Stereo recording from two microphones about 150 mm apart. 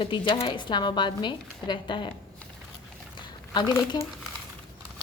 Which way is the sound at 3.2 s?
30° left (ahead or behind).